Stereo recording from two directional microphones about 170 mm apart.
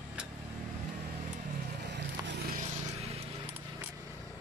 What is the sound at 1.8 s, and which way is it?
Vehicle, 90° right.